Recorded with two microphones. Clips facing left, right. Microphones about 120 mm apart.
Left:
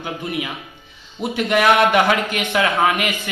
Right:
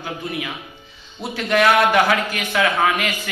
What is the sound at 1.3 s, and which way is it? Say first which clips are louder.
A man's voice: even; 15° left (ahead or behind).